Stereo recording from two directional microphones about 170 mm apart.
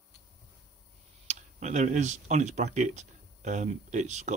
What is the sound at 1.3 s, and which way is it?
Speech, 45° right (ahead or behind).